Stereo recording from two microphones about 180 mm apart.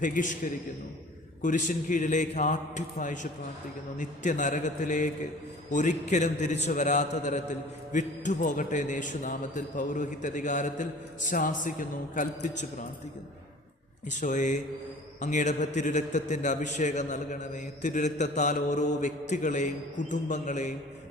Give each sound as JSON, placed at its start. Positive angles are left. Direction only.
{"t": 0.0, "sound": "a man's voice", "side_deg": 45}
{"t": 1.4, "sound": "a man's voice", "side_deg": 45}
{"t": 14.1, "sound": "a man's voice", "side_deg": 45}